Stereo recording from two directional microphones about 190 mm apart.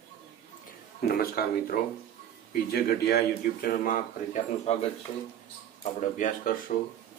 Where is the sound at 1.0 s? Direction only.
55° left (ahead or behind).